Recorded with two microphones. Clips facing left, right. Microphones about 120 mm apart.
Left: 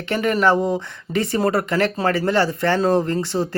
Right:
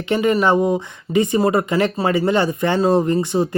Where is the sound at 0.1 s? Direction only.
15° right (ahead or behind).